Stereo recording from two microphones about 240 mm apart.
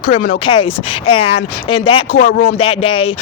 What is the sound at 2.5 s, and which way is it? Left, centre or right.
Speech, left.